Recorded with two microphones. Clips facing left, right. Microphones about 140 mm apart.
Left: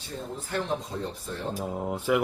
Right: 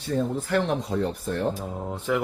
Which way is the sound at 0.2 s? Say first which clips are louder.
Right 7 dB; 80° right.